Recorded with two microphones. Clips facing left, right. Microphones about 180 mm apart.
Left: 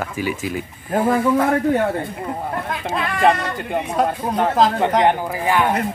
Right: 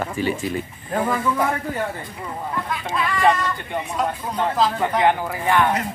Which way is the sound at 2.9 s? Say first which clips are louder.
Left 2 dB; 60° left (ahead or behind).